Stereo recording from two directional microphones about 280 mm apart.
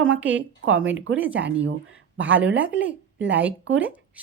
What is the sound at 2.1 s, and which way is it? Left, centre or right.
Speech, centre.